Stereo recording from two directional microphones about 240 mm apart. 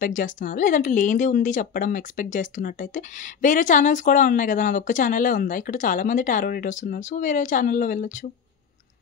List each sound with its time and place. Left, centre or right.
0.0 s speech: left